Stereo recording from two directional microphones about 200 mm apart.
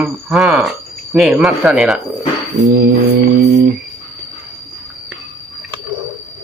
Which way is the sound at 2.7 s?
50° right (ahead or behind).